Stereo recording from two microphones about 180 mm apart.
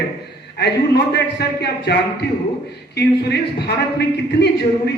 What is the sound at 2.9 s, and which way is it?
A man's voice, 70° left (ahead or behind).